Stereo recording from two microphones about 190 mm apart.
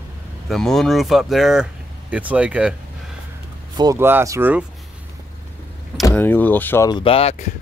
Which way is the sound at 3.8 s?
15° right (ahead or behind).